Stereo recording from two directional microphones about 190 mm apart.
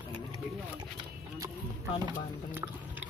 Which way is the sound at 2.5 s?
10° right (ahead or behind).